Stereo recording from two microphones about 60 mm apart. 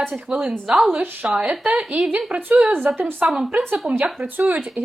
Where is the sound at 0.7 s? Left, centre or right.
Centre.